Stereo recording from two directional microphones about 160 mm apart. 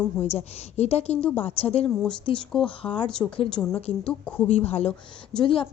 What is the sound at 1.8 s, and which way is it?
Speech, 5° left (ahead or behind).